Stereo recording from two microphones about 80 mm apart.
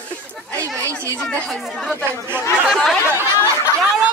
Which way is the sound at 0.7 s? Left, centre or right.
Right.